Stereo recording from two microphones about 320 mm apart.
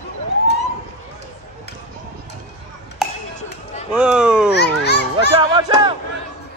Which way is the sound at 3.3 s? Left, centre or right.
Left.